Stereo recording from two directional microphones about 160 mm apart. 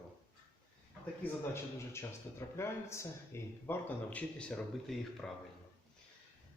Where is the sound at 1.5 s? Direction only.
15° left (ahead or behind).